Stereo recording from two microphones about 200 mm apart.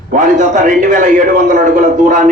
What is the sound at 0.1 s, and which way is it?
A man's voice, 40° right (ahead or behind).